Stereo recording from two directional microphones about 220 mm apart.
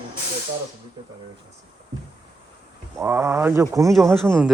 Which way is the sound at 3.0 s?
10° right (ahead or behind).